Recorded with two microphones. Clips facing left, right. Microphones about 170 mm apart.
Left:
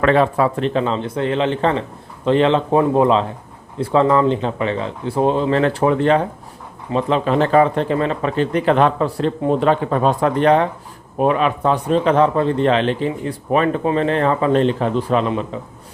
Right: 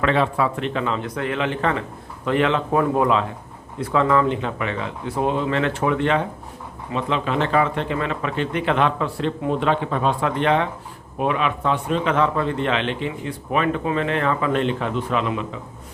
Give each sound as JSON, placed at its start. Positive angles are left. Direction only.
{"t": 0.0, "sound": "speech", "side_deg": 45}